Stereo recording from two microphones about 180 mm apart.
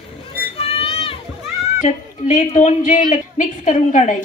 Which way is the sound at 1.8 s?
40° left (ahead or behind).